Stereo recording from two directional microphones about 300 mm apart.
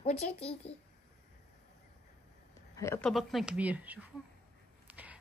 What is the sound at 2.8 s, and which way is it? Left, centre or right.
Speech, centre.